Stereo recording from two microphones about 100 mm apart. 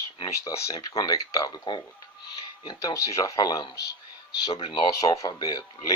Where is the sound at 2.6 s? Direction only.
35° left (ahead or behind).